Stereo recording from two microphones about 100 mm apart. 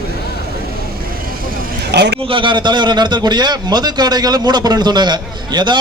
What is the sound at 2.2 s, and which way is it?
A man's voice, 60° right (ahead or behind).